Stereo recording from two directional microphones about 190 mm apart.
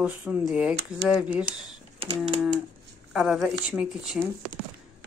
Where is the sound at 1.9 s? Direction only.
30° right (ahead or behind).